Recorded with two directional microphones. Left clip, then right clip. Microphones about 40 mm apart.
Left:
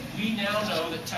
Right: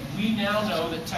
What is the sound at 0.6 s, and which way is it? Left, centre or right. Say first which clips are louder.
Speech: right 2 dB; left.